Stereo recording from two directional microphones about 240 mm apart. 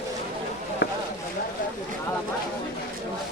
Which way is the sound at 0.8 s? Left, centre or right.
Left.